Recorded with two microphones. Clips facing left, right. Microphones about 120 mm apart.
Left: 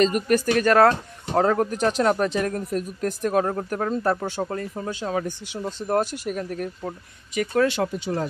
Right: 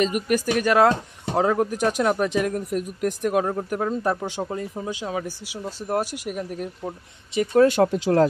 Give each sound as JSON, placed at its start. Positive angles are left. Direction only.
{"t": 0.0, "sound": "speech", "side_deg": -10}
{"t": 4.2, "sound": "speech", "side_deg": 0}
{"t": 4.6, "sound": "speech", "side_deg": -15}
{"t": 7.6, "sound": "speech", "side_deg": -45}
{"t": 7.9, "sound": "speech", "side_deg": -80}